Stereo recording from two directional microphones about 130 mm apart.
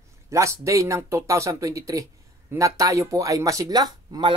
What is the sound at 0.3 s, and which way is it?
Speech, 25° right (ahead or behind).